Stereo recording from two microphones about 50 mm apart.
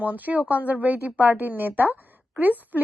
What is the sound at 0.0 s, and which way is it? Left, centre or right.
A woman's voice, right.